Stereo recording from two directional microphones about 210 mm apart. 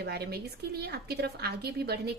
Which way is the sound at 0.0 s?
50° right (ahead or behind).